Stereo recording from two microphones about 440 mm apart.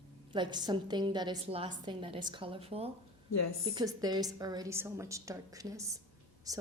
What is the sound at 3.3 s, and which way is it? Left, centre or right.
Speech, left.